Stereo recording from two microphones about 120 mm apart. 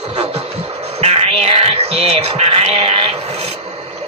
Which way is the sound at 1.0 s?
55° right (ahead or behind).